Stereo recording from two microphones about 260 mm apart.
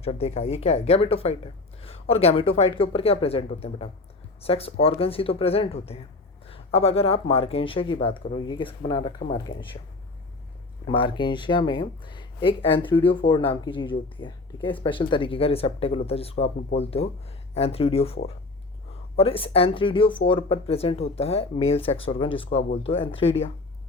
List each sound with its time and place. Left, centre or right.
0.0 s speech: left
10.8 s speech: centre